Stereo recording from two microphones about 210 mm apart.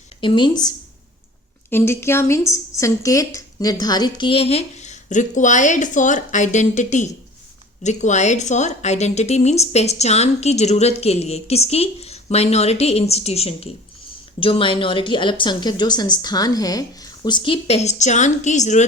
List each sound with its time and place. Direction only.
0.2 s speech: 25° left (ahead or behind)
1.7 s a woman's voice: 10° left (ahead or behind); by 18.9 s 35° left (ahead or behind)